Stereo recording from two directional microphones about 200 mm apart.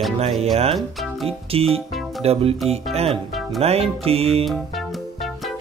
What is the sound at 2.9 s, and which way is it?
Speech, 30° right (ahead or behind).